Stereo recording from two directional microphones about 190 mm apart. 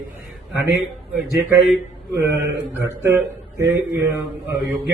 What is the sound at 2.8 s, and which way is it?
A man's voice, 15° right (ahead or behind).